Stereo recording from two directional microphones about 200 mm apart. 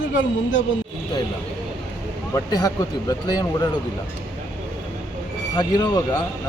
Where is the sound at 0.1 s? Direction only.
65° left (ahead or behind).